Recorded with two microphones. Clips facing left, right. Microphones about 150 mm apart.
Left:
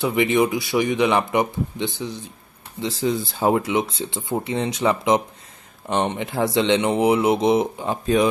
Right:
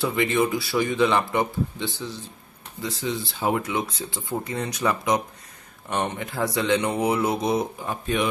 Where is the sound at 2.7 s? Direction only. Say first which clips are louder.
Left 4 dB; 25° left (ahead or behind).